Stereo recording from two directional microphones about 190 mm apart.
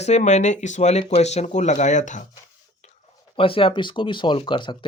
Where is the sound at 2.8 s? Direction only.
35° left (ahead or behind).